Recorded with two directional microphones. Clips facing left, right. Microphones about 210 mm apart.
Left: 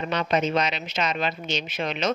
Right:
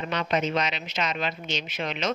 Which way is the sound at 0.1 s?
35° left (ahead or behind).